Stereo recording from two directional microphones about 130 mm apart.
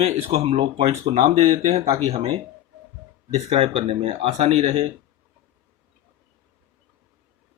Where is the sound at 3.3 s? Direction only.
40° right (ahead or behind).